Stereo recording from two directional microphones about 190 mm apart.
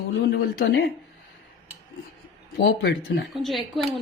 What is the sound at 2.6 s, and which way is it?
Speech, 55° left (ahead or behind).